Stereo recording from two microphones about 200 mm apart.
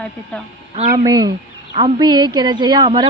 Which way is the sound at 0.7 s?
35° right (ahead or behind).